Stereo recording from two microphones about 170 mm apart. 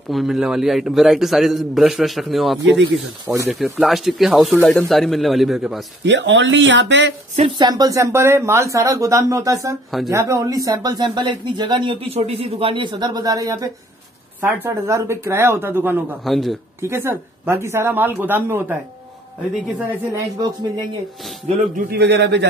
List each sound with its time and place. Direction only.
0.1 s a man's voice: centre (ahead or behind)
3.3 s speech: 15° right (ahead or behind)
3.5 s a man's voice: centre (ahead or behind)
6.0 s speech: 90° right
7.3 s speech: 30° right (ahead or behind); by 16.2 s 10° right (ahead or behind)
16.3 s a man's voice: centre (ahead or behind)
16.8 s speech: 15° right (ahead or behind)
20.1 s speech: 25° right (ahead or behind)
21.7 s a man's voice: 70° right (ahead or behind); by 22.5 s 90° right